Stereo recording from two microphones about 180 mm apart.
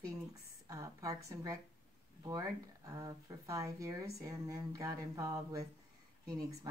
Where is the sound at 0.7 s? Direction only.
20° right (ahead or behind).